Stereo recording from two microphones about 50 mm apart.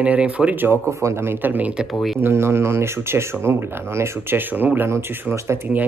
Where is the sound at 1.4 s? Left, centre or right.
Right.